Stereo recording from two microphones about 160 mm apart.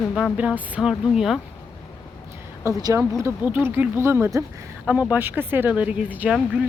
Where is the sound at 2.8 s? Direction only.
25° right (ahead or behind).